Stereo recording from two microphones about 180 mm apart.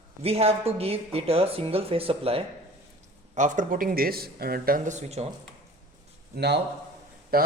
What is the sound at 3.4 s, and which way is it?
Speech, 45° right (ahead or behind).